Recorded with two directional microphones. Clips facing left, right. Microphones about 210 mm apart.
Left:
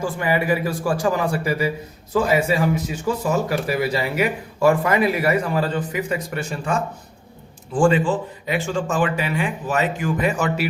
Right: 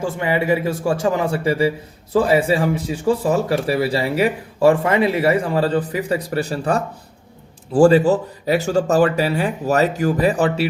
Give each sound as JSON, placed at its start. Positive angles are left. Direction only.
{"t": 0.0, "sound": "a man's voice", "side_deg": -25}